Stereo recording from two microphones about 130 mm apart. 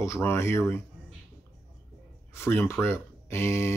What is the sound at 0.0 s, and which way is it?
Speech, 20° left (ahead or behind).